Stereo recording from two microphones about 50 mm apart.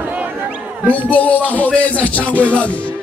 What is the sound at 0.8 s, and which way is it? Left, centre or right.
Music, left.